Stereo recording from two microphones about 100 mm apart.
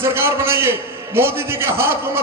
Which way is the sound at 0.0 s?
25° right (ahead or behind).